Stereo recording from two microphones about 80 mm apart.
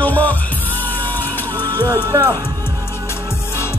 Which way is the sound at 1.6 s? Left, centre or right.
Right.